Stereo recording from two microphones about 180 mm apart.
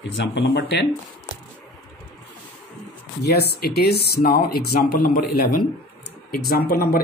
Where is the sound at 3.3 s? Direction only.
65° left (ahead or behind).